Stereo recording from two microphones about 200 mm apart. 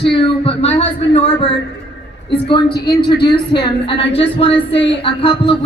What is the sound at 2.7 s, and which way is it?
Speech, 55° left (ahead or behind).